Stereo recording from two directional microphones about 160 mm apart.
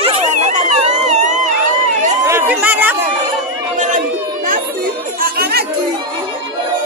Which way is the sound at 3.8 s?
55° right (ahead or behind).